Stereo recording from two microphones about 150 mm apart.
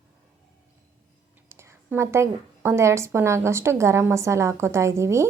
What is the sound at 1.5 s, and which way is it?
A woman's voice, 15° right (ahead or behind).